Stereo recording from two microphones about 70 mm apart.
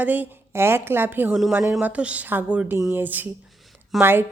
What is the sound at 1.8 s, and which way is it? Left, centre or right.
A woman's voice, centre.